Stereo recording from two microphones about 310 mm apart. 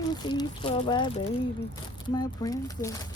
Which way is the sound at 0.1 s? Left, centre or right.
Centre.